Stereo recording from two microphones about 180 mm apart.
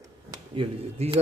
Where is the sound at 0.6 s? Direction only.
35° right (ahead or behind).